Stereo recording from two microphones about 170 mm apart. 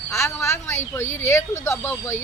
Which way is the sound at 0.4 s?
15° left (ahead or behind).